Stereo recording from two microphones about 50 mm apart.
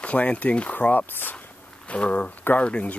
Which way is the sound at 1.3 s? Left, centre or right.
Left.